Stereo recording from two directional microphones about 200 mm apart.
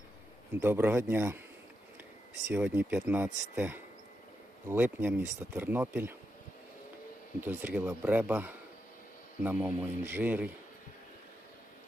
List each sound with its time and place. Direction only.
0.6 s speech: 10° right (ahead or behind)
2.5 s speech: 5° right (ahead or behind)
7.4 s speech: 10° right (ahead or behind)